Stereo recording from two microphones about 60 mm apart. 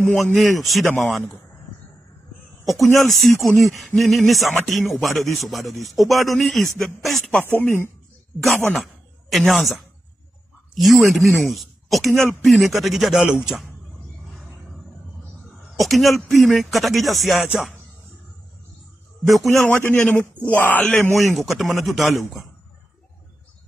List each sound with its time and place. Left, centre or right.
0.4 s speech: centre
2.6 s speech: centre
7.4 s a man's voice: left
8.7 s speech: centre
13.3 s a man's voice: centre
15.8 s speech: centre
19.2 s speech: centre
19.6 s a man's voice: left
20.8 s speech: centre
21.1 s speech: centre